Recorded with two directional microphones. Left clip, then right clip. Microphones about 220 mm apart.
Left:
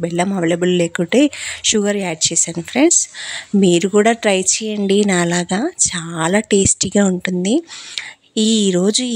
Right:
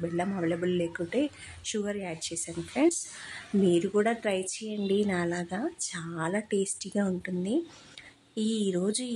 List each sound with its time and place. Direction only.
0.0 s speech: 40° left (ahead or behind)